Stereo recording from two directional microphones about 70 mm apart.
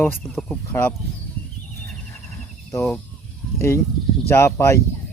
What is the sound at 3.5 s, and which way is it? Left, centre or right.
Speech, left.